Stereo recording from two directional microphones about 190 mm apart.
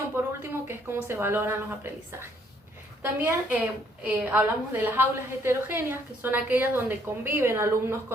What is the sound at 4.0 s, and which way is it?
Speech, 10° right (ahead or behind).